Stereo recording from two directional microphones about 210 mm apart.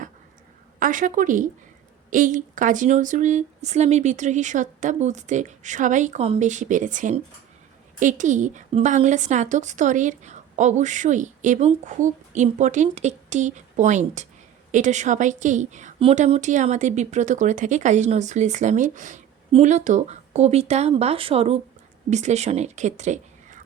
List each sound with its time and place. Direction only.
0.8 s a woman's voice: 40° right (ahead or behind)